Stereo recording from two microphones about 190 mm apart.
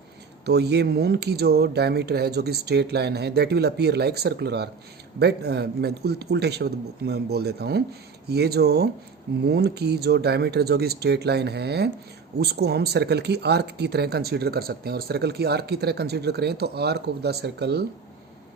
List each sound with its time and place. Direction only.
0.4 s speech: 60° right (ahead or behind)